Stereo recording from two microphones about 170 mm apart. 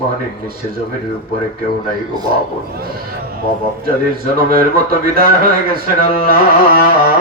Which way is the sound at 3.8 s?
60° right (ahead or behind).